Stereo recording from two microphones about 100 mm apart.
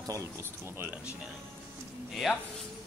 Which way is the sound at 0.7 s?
25° right (ahead or behind).